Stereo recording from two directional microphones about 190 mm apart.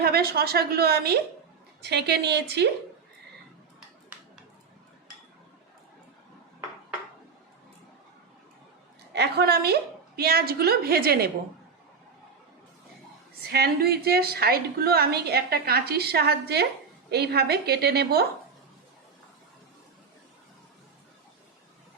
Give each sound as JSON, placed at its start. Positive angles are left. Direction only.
{"t": 0.0, "sound": "a woman's voice", "side_deg": -55}
{"t": 9.1, "sound": "a woman's voice", "side_deg": -60}
{"t": 13.5, "sound": "a woman's voice", "side_deg": -55}